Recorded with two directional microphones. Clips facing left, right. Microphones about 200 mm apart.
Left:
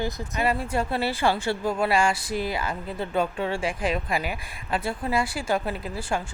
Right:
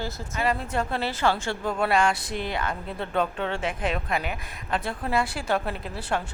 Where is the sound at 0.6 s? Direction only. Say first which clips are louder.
Left 2 dB; 5° left (ahead or behind).